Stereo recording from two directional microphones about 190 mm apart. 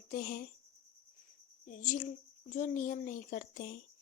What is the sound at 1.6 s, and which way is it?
Speech, 40° left (ahead or behind).